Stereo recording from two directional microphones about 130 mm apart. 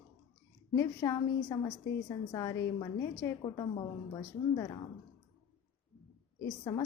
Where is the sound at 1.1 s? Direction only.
35° left (ahead or behind).